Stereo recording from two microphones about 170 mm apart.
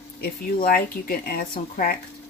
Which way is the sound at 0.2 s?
60° left (ahead or behind).